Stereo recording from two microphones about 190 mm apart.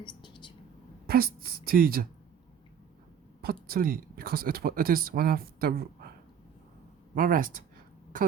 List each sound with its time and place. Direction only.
0.0 s whispering: 25° left (ahead or behind)
1.0 s speech: 55° right (ahead or behind)
3.4 s speech: 50° right (ahead or behind)
7.2 s speech: 45° right (ahead or behind)